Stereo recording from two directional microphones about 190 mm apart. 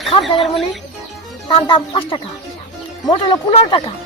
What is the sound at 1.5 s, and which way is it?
A woman's voice, 25° left (ahead or behind).